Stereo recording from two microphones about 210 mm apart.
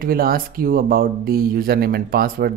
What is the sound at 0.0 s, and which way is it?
Speech, 45° right (ahead or behind).